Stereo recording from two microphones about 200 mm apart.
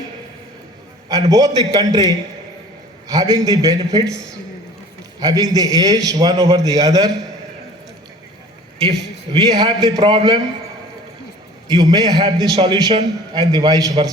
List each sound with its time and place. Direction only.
1.3 s a man's voice: 20° right (ahead or behind)
3.3 s a man's voice: 15° right (ahead or behind)
5.2 s a man's voice: 20° right (ahead or behind)
9.4 s a man's voice: 20° right (ahead or behind)
11.7 s a man's voice: 20° right (ahead or behind)